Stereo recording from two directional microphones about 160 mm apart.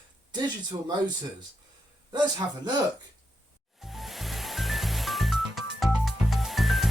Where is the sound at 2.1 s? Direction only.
25° right (ahead or behind).